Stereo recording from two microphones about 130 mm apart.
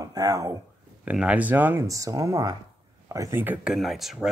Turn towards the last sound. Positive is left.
turn(degrees=0)  # may be behind; listen again after turning